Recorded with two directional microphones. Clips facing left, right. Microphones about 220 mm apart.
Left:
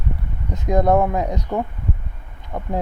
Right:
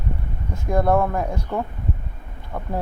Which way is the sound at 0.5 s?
20° left (ahead or behind).